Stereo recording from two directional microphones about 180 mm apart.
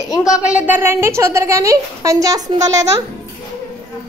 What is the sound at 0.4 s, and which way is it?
A woman's voice, 5° right (ahead or behind).